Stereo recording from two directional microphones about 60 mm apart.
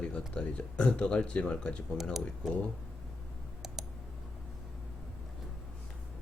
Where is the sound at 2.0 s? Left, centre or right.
Centre.